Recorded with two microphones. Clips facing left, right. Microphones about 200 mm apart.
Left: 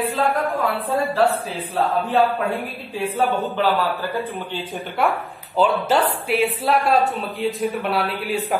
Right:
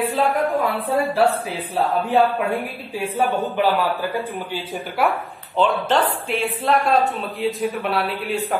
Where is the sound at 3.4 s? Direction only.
15° right (ahead or behind).